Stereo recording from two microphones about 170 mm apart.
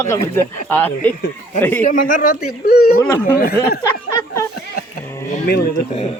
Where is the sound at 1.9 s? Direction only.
55° left (ahead or behind).